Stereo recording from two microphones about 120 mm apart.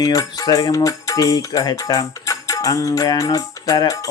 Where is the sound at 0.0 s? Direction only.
30° left (ahead or behind).